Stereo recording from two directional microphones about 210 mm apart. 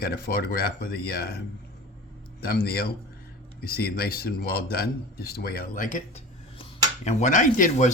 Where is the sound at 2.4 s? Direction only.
45° left (ahead or behind).